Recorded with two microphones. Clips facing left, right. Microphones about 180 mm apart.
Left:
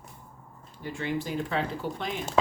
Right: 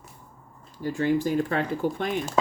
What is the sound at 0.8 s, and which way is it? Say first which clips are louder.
Speech: right 8 dB; 45° right (ahead or behind).